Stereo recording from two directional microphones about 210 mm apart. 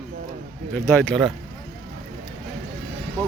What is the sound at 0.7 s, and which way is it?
Speech, 10° left (ahead or behind).